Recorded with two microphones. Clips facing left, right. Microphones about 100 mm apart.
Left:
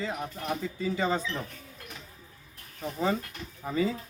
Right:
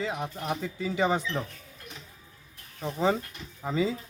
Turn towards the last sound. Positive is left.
turn(degrees=-20)  # may be behind; listen again after turning